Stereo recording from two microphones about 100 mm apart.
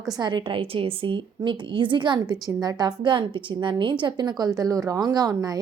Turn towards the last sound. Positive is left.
turn(degrees=-40)  # may be behind; listen again after turning